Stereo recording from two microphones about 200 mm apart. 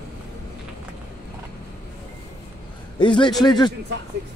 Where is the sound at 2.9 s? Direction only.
25° left (ahead or behind).